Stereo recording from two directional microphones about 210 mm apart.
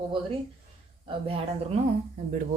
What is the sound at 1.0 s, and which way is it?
Speech, 25° right (ahead or behind).